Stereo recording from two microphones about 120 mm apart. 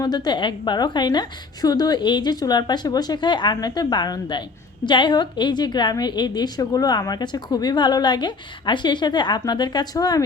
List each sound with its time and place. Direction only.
0.0 s a woman's voice: 35° left (ahead or behind)